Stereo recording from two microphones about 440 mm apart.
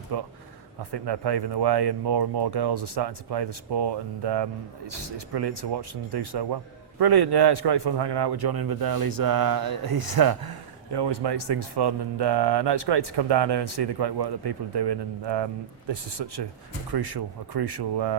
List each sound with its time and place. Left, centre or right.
0.1 s a man's voice: right
16.2 s a man's voice: right
17.5 s a man's voice: right